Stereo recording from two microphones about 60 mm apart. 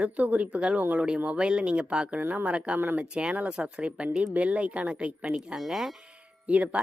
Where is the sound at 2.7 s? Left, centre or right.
Right.